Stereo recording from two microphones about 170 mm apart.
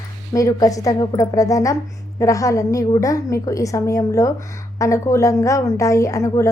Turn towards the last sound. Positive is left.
turn(degrees=15)  # may be behind; listen again after turning